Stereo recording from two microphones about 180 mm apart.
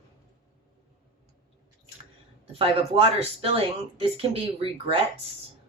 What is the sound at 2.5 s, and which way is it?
Speech, 30° right (ahead or behind).